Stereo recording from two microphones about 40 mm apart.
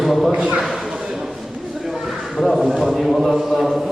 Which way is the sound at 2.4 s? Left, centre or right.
Centre.